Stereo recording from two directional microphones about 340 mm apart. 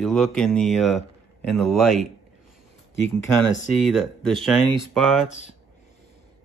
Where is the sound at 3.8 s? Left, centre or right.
Centre.